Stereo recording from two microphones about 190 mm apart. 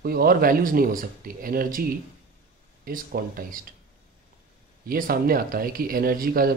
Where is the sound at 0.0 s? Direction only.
50° right (ahead or behind).